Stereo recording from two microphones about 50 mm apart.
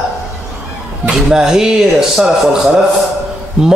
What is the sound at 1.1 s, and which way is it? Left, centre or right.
Speech, centre.